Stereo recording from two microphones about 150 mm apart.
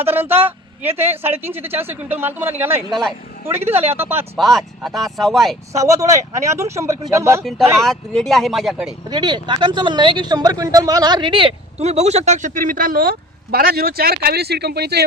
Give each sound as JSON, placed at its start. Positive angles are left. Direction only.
{"t": 0.0, "sound": "a woman's voice", "side_deg": -15}
{"t": 2.9, "sound": "speech", "side_deg": 0}
{"t": 3.9, "sound": "a woman's voice", "side_deg": -15}
{"t": 4.4, "sound": "speech", "side_deg": 0}
{"t": 5.7, "sound": "speech", "side_deg": -20}
{"t": 7.4, "sound": "speech", "side_deg": 0}
{"t": 9.0, "sound": "speech", "side_deg": -30}